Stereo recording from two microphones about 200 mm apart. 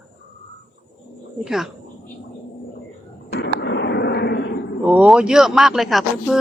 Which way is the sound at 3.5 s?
60° left (ahead or behind).